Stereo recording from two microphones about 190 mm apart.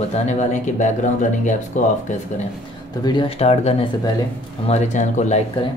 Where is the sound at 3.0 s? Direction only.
25° left (ahead or behind).